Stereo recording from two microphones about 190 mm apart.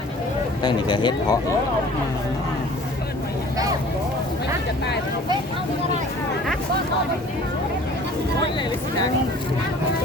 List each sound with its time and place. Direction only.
0.6 s speech: 25° left (ahead or behind)